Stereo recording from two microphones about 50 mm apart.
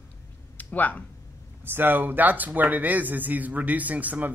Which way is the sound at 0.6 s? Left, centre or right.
Left.